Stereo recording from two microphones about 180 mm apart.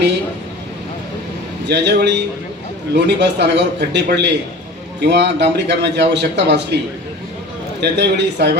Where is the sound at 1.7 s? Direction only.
70° right (ahead or behind).